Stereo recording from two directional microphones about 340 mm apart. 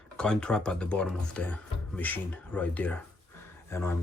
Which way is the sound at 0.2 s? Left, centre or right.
Centre.